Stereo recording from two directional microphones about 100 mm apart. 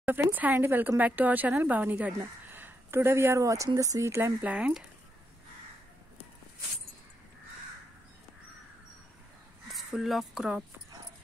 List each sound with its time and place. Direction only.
0.0 s speech: 20° right (ahead or behind)
9.7 s speech: centre (ahead or behind)